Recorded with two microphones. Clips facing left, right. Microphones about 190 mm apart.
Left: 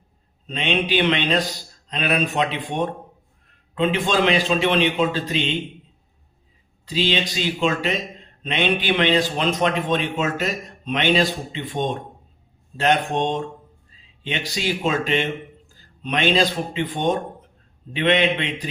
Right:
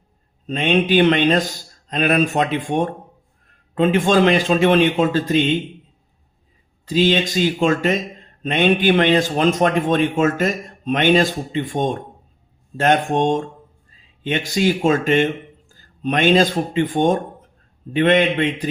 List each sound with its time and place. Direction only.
0.4 s a man's voice: 50° right (ahead or behind)
6.8 s a man's voice: 50° right (ahead or behind)